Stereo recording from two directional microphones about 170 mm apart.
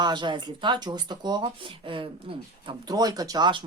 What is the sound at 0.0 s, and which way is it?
Speech, 25° right (ahead or behind).